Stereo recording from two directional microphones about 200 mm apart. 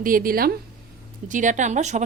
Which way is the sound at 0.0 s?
45° right (ahead or behind).